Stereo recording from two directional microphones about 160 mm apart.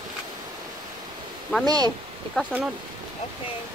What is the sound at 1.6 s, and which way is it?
Speech, 25° right (ahead or behind).